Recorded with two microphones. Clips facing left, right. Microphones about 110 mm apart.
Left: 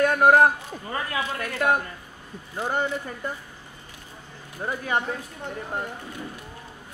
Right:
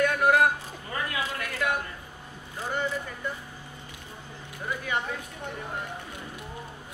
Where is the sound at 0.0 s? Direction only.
40° left (ahead or behind).